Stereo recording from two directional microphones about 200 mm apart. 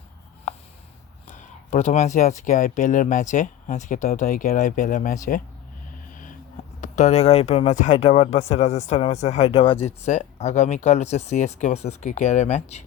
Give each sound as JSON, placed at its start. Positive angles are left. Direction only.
{"t": 1.7, "sound": "speech", "side_deg": 35}
{"t": 6.8, "sound": "speech", "side_deg": 35}